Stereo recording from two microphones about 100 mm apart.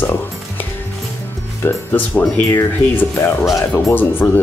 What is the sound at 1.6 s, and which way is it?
Speech, 25° left (ahead or behind).